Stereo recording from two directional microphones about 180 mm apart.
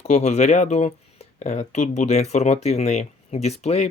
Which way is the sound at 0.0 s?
40° left (ahead or behind).